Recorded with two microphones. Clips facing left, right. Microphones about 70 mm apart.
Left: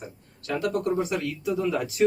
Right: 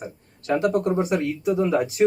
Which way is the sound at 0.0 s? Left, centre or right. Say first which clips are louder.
Right 5 dB; right.